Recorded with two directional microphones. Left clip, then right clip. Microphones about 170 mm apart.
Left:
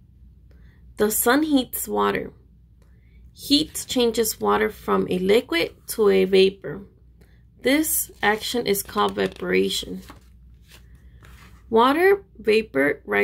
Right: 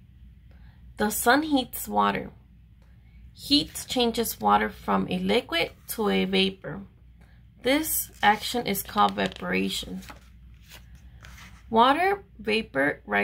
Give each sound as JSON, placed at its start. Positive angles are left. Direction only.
{"t": 0.9, "sound": "speech", "side_deg": 20}
{"t": 3.3, "sound": "a woman's voice", "side_deg": 25}
{"t": 11.7, "sound": "speech", "side_deg": 20}